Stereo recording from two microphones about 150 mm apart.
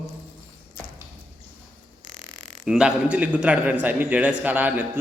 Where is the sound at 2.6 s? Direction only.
5° right (ahead or behind).